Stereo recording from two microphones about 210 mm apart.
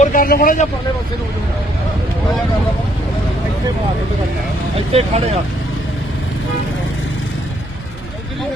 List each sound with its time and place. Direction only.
0.0 s a man's voice: 40° left (ahead or behind)
4.9 s speech: 30° right (ahead or behind)